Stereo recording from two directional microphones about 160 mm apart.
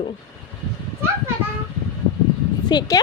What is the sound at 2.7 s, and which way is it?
Speech, 25° left (ahead or behind).